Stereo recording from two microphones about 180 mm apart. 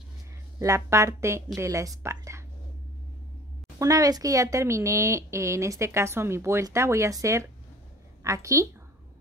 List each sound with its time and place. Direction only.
0.6 s a woman's voice: 15° right (ahead or behind)
3.8 s a woman's voice: 20° right (ahead or behind)